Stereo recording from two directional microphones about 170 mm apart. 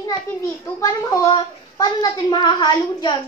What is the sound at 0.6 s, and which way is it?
A woman's voice, 15° left (ahead or behind).